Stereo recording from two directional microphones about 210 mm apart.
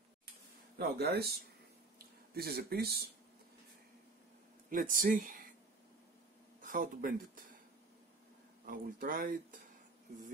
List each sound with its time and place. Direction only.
0.7 s speech: 50° right (ahead or behind)
2.3 s speech: 50° right (ahead or behind)
4.6 s speech: 40° right (ahead or behind)
6.6 s speech: 40° right (ahead or behind)
8.6 s speech: 40° right (ahead or behind)